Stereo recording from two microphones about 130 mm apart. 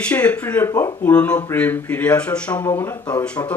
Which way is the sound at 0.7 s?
25° left (ahead or behind).